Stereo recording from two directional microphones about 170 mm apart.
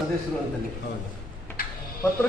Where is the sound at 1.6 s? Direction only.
60° left (ahead or behind).